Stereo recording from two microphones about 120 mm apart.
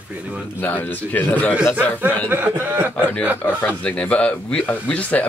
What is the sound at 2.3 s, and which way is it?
Speech, 15° right (ahead or behind).